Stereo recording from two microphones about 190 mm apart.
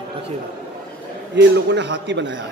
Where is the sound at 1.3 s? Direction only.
65° right (ahead or behind).